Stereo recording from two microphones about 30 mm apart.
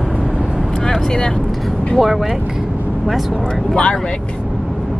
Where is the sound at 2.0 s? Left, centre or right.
Centre.